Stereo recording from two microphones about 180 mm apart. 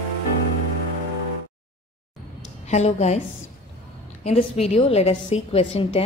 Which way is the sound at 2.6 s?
40° left (ahead or behind).